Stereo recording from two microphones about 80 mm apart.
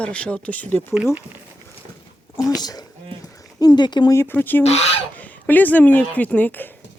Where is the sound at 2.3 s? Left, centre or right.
Left.